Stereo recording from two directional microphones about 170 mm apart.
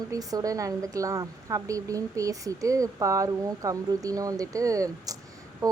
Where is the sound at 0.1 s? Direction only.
20° right (ahead or behind).